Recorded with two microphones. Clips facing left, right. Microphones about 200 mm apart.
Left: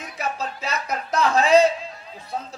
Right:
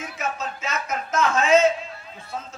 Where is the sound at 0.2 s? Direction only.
35° left (ahead or behind).